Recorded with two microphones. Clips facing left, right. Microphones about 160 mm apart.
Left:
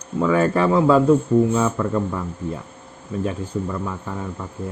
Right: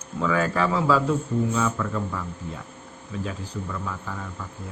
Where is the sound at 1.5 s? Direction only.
40° left (ahead or behind).